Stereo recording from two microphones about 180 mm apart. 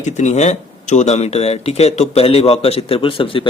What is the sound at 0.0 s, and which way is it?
A man's voice, 40° left (ahead or behind).